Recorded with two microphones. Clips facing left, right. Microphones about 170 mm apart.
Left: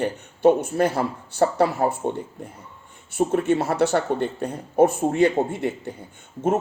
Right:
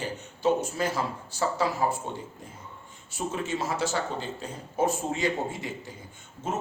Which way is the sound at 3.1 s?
60° left (ahead or behind).